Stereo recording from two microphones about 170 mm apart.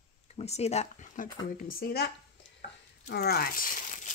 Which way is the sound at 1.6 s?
60° left (ahead or behind).